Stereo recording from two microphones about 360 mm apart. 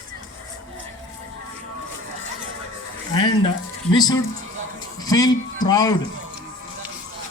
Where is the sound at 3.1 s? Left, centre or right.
Centre.